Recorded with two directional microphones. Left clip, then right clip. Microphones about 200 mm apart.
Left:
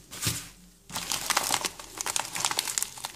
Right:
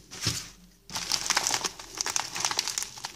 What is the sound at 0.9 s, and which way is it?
Crumpling, centre (ahead or behind).